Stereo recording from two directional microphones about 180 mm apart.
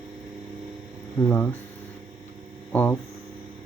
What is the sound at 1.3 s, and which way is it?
Speech, 15° left (ahead or behind).